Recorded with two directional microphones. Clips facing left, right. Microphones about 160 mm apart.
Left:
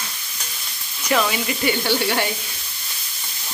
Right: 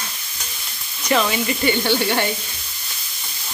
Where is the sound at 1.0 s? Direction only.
5° left (ahead or behind).